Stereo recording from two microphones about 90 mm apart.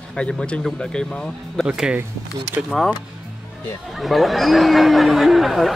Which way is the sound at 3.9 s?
Centre (ahead or behind).